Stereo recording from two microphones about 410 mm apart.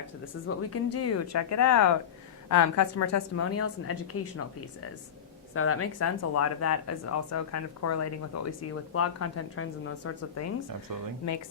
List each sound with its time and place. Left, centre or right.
0.4 s speech: left
5.5 s speech: left